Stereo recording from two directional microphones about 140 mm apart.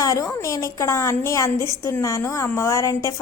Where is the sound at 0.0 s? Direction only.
25° left (ahead or behind).